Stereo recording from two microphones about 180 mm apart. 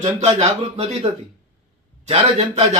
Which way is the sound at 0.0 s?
35° right (ahead or behind).